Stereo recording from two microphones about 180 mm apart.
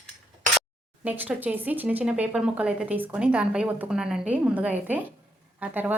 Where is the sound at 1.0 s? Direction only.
10° right (ahead or behind).